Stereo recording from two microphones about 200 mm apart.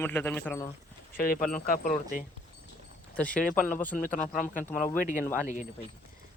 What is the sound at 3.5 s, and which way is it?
Speech, 40° left (ahead or behind).